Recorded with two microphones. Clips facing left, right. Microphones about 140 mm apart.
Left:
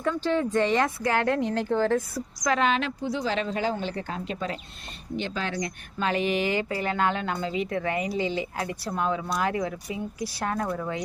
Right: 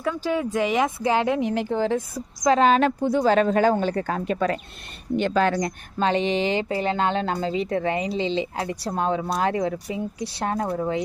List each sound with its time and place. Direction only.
0.0 s speech: 10° right (ahead or behind)
2.5 s a woman's voice: 35° right (ahead or behind)
6.0 s speech: 30° right (ahead or behind)